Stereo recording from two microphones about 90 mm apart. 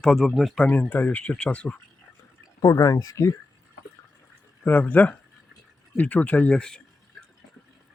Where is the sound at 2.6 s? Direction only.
40° left (ahead or behind).